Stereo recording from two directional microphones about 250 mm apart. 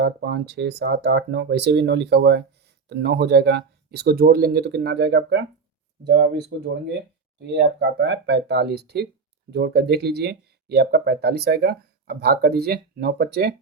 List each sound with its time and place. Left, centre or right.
0.0 s speech: right
7.4 s speech: right